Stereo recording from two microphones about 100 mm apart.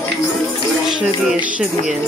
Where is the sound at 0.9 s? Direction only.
5° right (ahead or behind).